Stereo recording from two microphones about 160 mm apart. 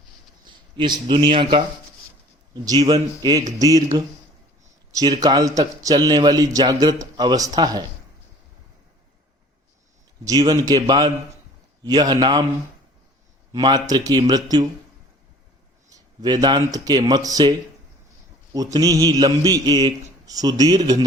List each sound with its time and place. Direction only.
0.4 s speech: 30° right (ahead or behind)
2.6 s a man's voice: 25° right (ahead or behind)
4.9 s a man's voice: 25° right (ahead or behind)
10.2 s a man's voice: 25° right (ahead or behind)
13.5 s a man's voice: 25° right (ahead or behind)
15.9 s a man's voice: 25° right (ahead or behind)
18.5 s a man's voice: 20° right (ahead or behind)